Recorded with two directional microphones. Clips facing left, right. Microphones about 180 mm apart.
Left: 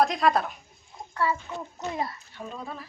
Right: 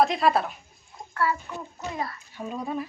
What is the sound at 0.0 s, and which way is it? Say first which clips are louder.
Speech: right 1 dB; centre (ahead or behind).